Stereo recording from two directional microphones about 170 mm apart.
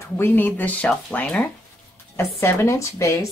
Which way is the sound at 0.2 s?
10° left (ahead or behind).